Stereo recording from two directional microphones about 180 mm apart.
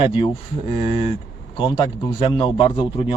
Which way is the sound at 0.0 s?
25° left (ahead or behind).